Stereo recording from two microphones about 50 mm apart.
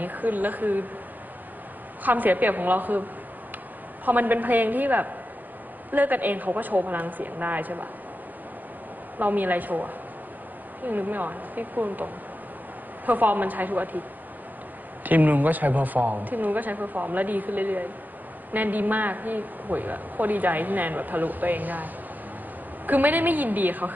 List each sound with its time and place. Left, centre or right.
0.0 s a woman's voice: right
2.0 s a woman's voice: right
9.2 s a woman's voice: right
15.0 s a woman's voice: right
22.8 s a woman's voice: right